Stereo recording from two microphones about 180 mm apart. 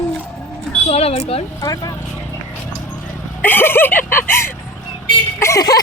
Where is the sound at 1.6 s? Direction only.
20° left (ahead or behind).